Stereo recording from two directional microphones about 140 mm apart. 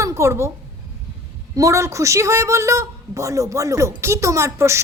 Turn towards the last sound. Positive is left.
turn(degrees=-20)  # may be behind; listen again after turning